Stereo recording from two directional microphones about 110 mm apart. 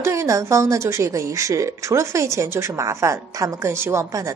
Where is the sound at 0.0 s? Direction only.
25° right (ahead or behind).